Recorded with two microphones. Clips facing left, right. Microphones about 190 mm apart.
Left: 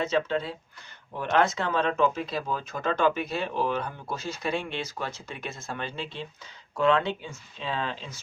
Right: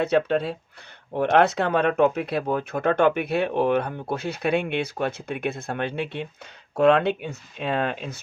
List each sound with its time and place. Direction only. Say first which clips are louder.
0.0 s speech: right 5 dB; 60° right (ahead or behind)